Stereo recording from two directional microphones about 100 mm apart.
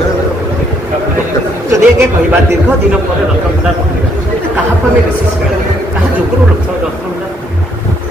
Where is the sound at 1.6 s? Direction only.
30° right (ahead or behind).